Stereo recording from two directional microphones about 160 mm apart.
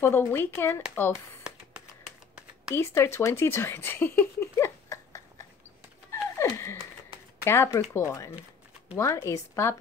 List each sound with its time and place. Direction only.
0.0 s a woman's voice: 15° left (ahead or behind)
2.7 s speech: 15° left (ahead or behind)
6.3 s a sound: 15° left (ahead or behind)
7.4 s a woman's voice: 15° left (ahead or behind)